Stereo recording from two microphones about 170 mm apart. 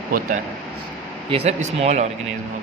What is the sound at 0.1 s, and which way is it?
Speech, 55° right (ahead or behind).